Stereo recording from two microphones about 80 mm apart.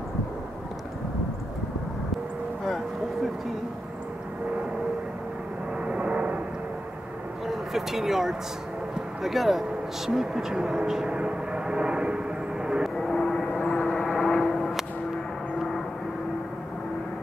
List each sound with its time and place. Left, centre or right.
5.9 s vehicle: centre
7.4 s speech: centre
12.6 s vehicle: centre
12.9 s vehicle: centre